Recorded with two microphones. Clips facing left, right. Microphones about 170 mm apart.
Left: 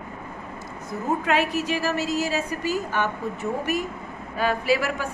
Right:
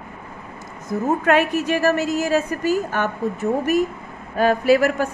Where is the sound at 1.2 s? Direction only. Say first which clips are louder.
Right 5 dB; 50° right (ahead or behind).